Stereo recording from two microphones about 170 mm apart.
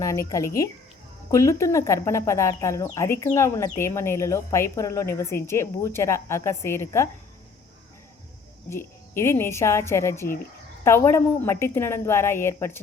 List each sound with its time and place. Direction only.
0.0 s speech: 20° left (ahead or behind)
8.7 s speech: 15° left (ahead or behind)